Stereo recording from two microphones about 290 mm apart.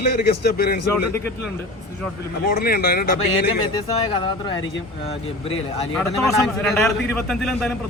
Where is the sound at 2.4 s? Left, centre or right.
Left.